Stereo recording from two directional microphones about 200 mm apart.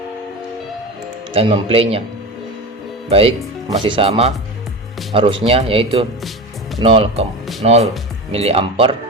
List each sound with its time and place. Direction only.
1.3 s speech: 30° right (ahead or behind)
3.1 s speech: 30° right (ahead or behind)